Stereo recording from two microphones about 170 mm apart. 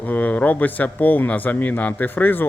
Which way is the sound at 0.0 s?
10° left (ahead or behind).